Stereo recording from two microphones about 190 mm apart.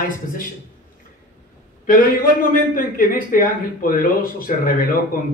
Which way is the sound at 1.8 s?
45° left (ahead or behind).